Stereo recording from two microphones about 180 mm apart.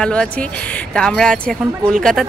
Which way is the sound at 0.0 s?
5° left (ahead or behind).